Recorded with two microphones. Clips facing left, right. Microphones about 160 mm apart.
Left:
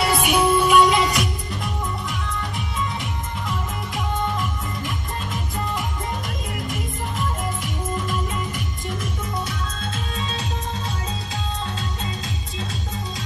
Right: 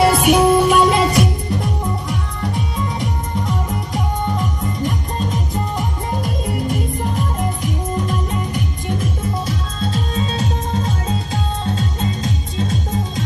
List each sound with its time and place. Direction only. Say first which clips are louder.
0.0 s music: right 7 dB; 50° right (ahead or behind)